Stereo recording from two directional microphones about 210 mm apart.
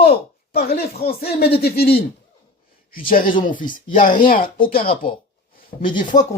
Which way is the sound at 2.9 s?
40° left (ahead or behind).